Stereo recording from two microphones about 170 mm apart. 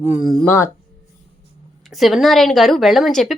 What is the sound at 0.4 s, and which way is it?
Speech, 15° left (ahead or behind).